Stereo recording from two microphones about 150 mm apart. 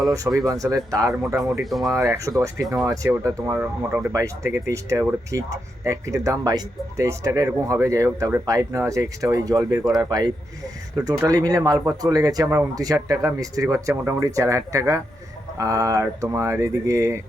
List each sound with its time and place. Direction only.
0.1 s speech: 20° right (ahead or behind)